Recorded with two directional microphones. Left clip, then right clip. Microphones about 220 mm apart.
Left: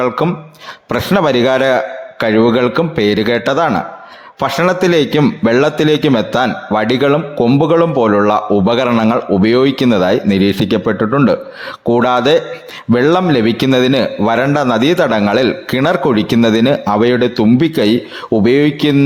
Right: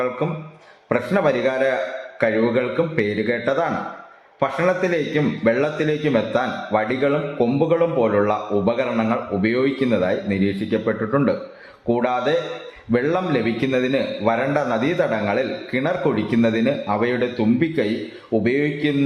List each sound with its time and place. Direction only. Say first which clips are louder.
0.9 s a man's voice: left 6 dB; 45° left (ahead or behind)